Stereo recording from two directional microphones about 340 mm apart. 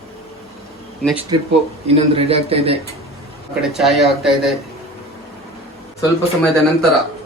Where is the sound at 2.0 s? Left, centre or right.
Centre.